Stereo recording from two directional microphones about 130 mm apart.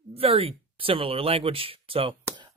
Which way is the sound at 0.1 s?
45° right (ahead or behind).